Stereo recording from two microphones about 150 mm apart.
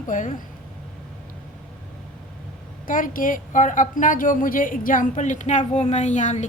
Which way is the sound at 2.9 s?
65° left (ahead or behind).